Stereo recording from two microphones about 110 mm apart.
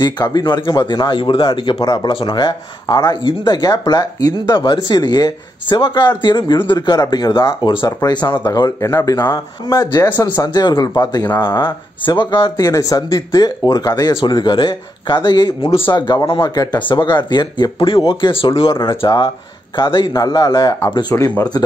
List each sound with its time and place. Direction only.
0.0 s speech: 40° left (ahead or behind)
9.3 s speech: 25° left (ahead or behind)
10.4 s speech: 40° left (ahead or behind)
12.5 s speech: 30° left (ahead or behind)
14.1 s speech: 45° left (ahead or behind); by 21.5 s 30° left (ahead or behind)